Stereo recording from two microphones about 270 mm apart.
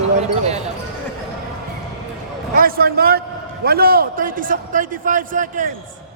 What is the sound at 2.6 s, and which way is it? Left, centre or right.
A man's voice, right.